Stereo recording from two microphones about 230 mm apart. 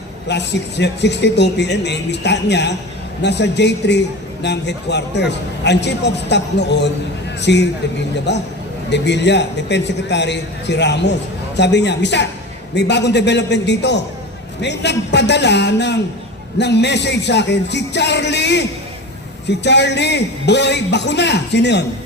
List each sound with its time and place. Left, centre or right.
0.3 s speech: left